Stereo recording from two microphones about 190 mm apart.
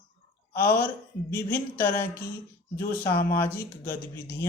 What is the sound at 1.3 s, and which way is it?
Speech, 10° left (ahead or behind).